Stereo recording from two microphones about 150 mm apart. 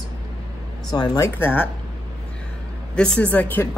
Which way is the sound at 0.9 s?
25° left (ahead or behind).